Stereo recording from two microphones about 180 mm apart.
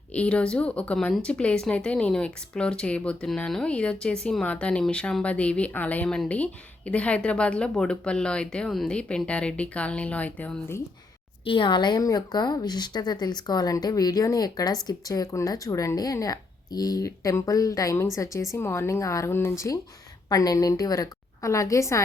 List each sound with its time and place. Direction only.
0.1 s speech: 5° left (ahead or behind)
11.4 s a woman's voice: 25° left (ahead or behind)